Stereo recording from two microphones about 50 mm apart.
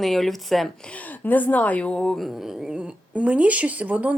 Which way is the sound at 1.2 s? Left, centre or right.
Left.